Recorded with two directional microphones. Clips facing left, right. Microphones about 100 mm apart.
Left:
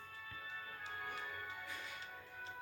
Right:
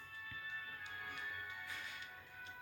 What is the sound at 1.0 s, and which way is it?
Music, 35° left (ahead or behind).